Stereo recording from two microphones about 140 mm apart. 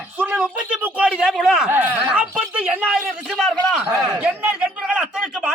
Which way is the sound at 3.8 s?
25° right (ahead or behind).